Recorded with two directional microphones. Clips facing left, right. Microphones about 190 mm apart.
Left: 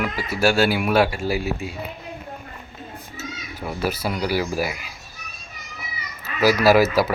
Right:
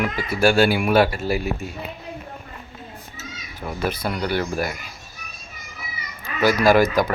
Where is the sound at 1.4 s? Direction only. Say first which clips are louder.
Even; 45° right (ahead or behind).